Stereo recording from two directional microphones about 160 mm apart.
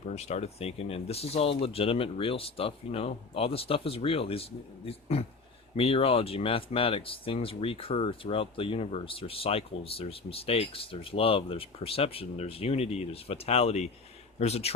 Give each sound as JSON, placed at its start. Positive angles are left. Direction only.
{"t": 0.2, "sound": "speech", "side_deg": 40}